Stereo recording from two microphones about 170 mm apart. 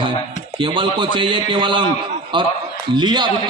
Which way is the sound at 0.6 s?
30° right (ahead or behind).